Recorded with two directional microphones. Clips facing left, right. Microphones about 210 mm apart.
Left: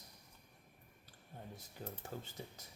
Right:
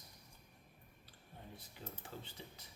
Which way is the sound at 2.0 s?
40° left (ahead or behind).